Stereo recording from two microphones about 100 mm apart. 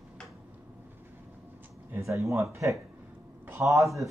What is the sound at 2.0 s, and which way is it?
Speech, 30° right (ahead or behind).